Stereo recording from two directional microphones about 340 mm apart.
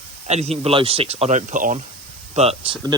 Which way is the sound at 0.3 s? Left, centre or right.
Centre.